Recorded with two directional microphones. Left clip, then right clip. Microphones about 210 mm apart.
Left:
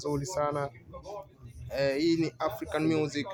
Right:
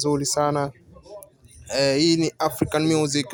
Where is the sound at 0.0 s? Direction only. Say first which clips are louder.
Right 9 dB; 45° right (ahead or behind).